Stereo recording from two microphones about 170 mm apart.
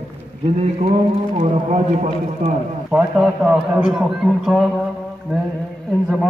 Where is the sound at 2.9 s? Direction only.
5° right (ahead or behind).